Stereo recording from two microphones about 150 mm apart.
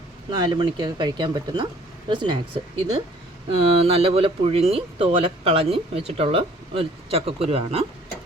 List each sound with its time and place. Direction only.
0.3 s speech: 25° right (ahead or behind)